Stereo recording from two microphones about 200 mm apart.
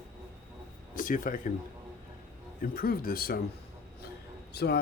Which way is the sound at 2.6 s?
45° left (ahead or behind).